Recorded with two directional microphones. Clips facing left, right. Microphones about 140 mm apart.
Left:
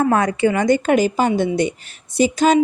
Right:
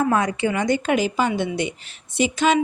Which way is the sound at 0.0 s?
50° left (ahead or behind).